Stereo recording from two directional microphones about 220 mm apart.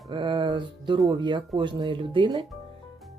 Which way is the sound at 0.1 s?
20° right (ahead or behind).